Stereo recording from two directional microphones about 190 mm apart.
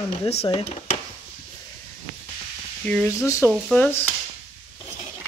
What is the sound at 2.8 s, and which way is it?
Speech, 5° left (ahead or behind).